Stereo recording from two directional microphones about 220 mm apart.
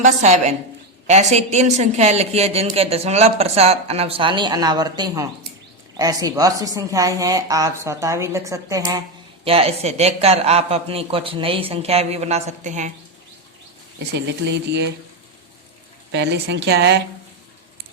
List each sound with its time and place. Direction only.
0.0 s a woman's voice: 30° right (ahead or behind)
14.1 s a woman's voice: 50° right (ahead or behind)
16.1 s a woman's voice: 50° right (ahead or behind)